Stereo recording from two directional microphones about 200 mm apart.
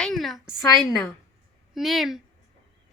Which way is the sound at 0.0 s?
Centre (ahead or behind).